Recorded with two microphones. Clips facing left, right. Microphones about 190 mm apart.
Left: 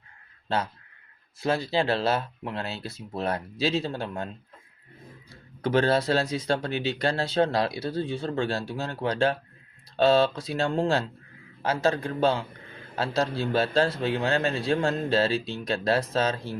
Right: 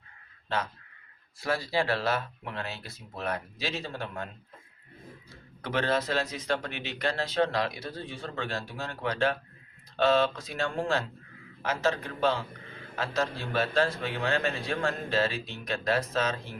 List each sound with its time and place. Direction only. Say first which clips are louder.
1.4 s speech: left 4 dB; 25° left (ahead or behind)
5.6 s speech: left 6 dB; 30° left (ahead or behind)